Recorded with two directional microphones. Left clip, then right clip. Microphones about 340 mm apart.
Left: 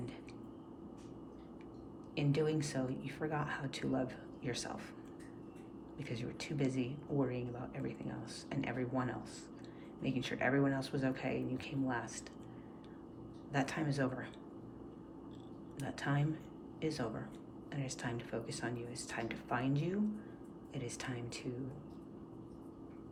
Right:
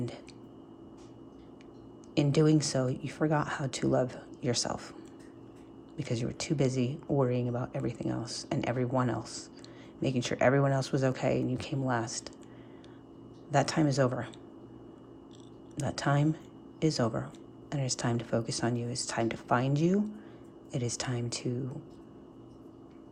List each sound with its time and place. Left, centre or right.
2.1 s speech: centre
6.0 s speech: centre
13.5 s speech: centre
15.8 s speech: centre